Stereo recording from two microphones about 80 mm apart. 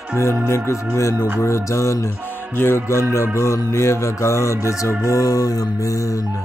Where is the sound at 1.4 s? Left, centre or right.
Left.